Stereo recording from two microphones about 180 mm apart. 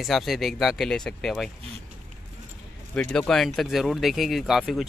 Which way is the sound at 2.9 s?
5° left (ahead or behind).